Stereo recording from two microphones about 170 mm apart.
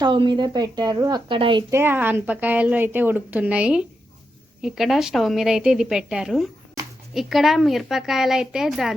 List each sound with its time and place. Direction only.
0.0 s a woman's voice: 30° right (ahead or behind)
1.7 s a woman's voice: 15° right (ahead or behind)
6.8 s a sound: 20° right (ahead or behind)
7.1 s a woman's voice: centre (ahead or behind)